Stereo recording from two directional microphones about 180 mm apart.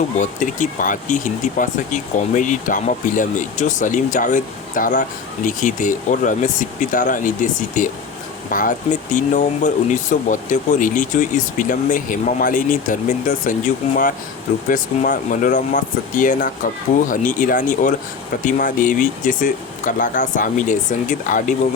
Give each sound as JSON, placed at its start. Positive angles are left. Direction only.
{"t": 0.2, "sound": "speech", "side_deg": 45}